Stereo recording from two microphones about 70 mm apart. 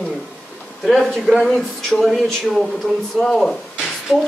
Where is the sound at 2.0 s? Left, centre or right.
Centre.